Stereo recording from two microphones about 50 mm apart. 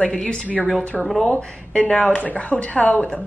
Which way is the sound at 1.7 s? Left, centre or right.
Left.